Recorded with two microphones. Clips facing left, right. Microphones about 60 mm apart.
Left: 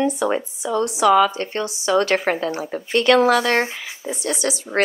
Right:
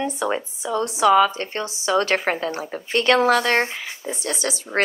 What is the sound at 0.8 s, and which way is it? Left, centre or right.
Speech, right.